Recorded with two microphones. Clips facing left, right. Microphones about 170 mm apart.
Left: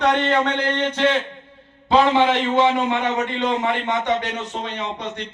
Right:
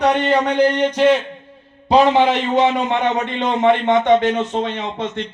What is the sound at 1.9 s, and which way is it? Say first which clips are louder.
A man's voice: right 3 dB; 20° right (ahead or behind).